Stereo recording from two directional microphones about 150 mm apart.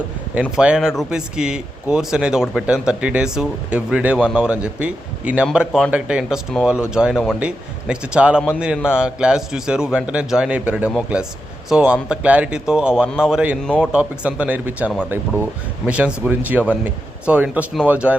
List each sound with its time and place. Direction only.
0.5 s a man's voice: 5° right (ahead or behind)